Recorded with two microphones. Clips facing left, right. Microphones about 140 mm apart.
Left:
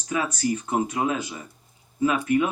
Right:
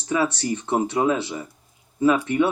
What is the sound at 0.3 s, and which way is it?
Speech, 30° right (ahead or behind).